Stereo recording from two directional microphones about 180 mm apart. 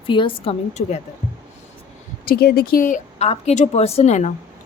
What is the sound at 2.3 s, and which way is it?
Speech, 60° left (ahead or behind).